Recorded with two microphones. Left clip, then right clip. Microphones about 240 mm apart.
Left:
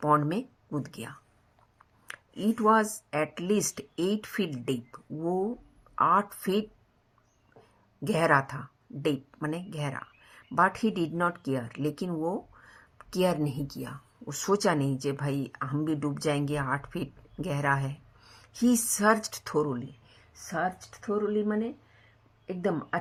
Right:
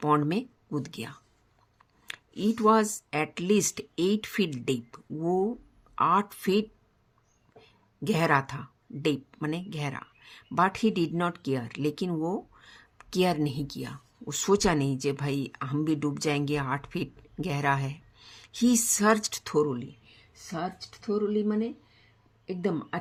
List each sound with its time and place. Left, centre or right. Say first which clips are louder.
0.0 s speech: even; right
2.0 s a sound: right 1 dB; right
2.9 s speech: even; right
8.0 s a woman's voice: left 1 dB; right